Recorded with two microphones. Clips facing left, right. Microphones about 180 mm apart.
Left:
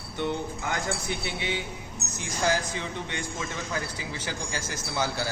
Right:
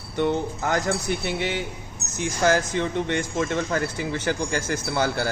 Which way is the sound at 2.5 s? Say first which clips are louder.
Right 7 dB; 60° right (ahead or behind).